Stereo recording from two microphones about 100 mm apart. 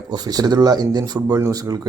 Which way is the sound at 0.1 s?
45° right (ahead or behind).